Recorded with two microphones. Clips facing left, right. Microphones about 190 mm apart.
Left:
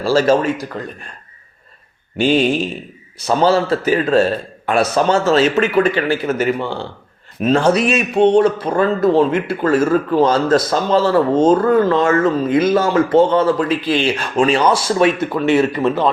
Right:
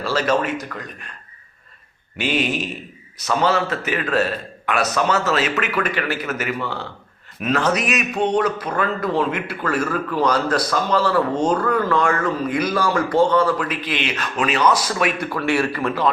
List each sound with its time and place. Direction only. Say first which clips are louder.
0.0 s speech: left 6 dB; 30° left (ahead or behind)
2.1 s a man's voice: left 7 dB; 30° left (ahead or behind)